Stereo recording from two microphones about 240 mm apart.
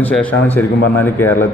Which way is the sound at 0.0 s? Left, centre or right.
Centre.